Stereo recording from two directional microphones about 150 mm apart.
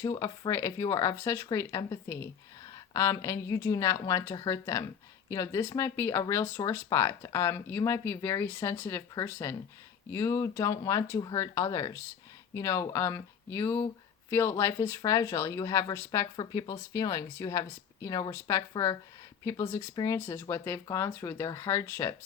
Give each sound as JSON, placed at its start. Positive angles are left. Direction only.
{"t": 0.0, "sound": "speech", "side_deg": 25}